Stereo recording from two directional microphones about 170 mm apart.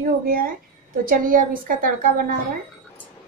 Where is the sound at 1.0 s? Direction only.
55° right (ahead or behind).